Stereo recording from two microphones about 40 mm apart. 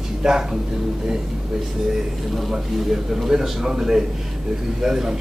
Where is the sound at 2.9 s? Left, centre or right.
Centre.